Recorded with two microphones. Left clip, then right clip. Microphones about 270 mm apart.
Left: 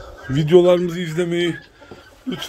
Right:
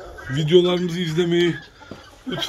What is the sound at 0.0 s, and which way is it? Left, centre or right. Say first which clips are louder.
Speech: left 3 dB; left.